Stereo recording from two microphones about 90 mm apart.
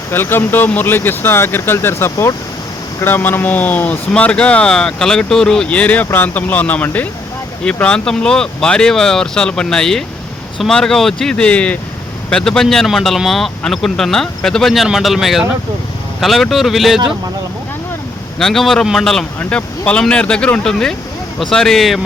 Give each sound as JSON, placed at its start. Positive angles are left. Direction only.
{"t": 0.1, "sound": "speech", "side_deg": 25}
{"t": 18.3, "sound": "speech", "side_deg": 5}
{"t": 19.4, "sound": "speech", "side_deg": 15}